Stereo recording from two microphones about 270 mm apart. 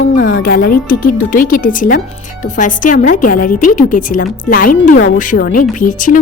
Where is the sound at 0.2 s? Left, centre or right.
Left.